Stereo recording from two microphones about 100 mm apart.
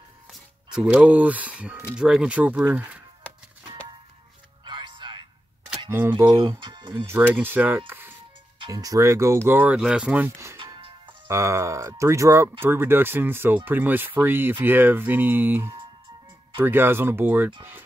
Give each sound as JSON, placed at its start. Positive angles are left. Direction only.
{"t": 0.3, "sound": "speech", "side_deg": -5}
{"t": 4.6, "sound": "music", "side_deg": -55}
{"t": 5.9, "sound": "speech", "side_deg": -20}
{"t": 6.6, "sound": "speech", "side_deg": -50}
{"t": 7.1, "sound": "speech", "side_deg": -20}
{"t": 8.6, "sound": "speech", "side_deg": -40}
{"t": 9.8, "sound": "speech", "side_deg": -10}
{"t": 10.6, "sound": "music", "side_deg": -60}
{"t": 11.2, "sound": "speech", "side_deg": -30}